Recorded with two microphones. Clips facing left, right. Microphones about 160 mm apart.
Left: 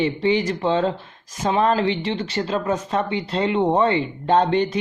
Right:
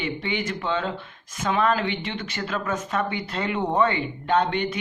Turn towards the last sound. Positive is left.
turn(degrees=35)  # may be behind; listen again after turning